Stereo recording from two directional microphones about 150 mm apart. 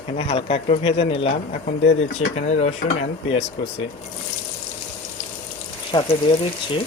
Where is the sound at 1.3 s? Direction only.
55° left (ahead or behind).